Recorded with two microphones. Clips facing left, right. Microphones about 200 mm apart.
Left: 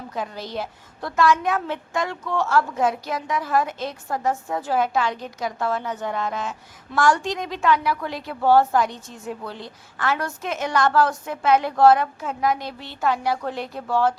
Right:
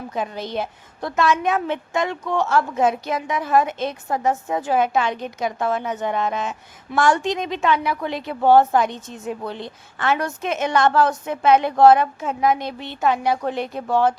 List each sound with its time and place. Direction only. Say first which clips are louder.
0.1 s a woman's voice: right 3 dB; 20° right (ahead or behind)